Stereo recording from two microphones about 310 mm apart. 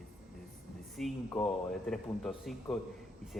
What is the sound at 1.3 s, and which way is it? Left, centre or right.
Speech, centre.